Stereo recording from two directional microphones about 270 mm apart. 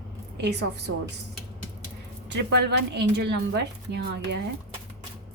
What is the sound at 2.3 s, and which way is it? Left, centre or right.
A woman's voice, right.